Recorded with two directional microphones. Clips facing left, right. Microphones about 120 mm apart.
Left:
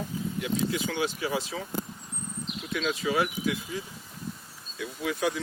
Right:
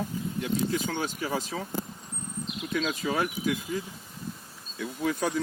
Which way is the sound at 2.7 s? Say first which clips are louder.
Even; 45° right (ahead or behind).